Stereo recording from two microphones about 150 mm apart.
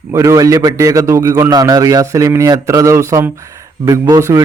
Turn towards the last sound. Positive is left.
turn(degrees=-20)  # may be behind; listen again after turning